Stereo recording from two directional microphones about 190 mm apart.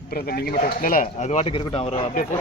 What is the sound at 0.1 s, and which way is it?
Speech, 50° left (ahead or behind).